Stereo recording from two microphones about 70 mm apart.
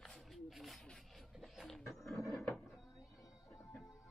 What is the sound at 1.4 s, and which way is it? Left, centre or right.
Speech, centre.